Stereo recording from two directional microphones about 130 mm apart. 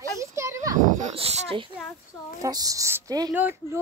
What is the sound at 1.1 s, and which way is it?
Speech, 50° right (ahead or behind).